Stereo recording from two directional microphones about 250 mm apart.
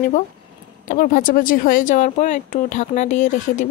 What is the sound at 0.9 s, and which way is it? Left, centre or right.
Speech, left.